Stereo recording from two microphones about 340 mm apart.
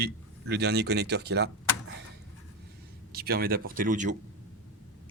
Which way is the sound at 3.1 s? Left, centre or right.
Right.